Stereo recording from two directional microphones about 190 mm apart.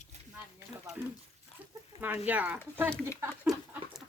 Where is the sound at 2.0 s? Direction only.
10° right (ahead or behind).